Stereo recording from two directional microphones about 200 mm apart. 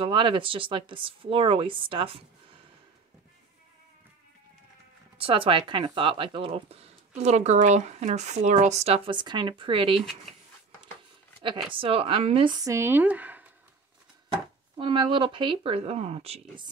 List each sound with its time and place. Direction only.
0.0 s speech: 25° right (ahead or behind)
5.1 s speech: 25° right (ahead or behind)
11.4 s speech: 25° right (ahead or behind); by 13.5 s 10° right (ahead or behind)
14.8 s speech: 25° right (ahead or behind)